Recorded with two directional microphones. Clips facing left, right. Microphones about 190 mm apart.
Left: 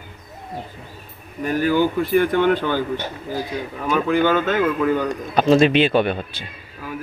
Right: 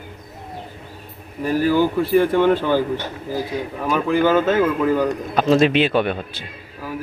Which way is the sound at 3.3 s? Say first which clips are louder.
Right 2 dB; centre (ahead or behind).